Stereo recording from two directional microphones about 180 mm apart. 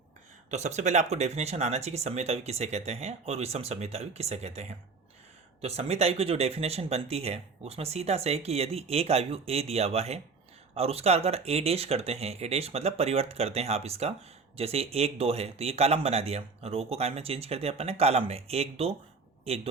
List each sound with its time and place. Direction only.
0.5 s speech: 40° right (ahead or behind)